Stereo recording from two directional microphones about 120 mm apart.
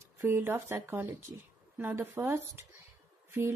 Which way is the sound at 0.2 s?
20° right (ahead or behind).